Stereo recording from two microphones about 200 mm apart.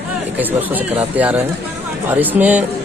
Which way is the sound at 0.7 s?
10° right (ahead or behind).